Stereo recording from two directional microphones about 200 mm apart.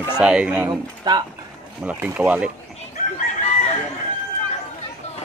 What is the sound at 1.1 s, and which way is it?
Speech, 20° right (ahead or behind).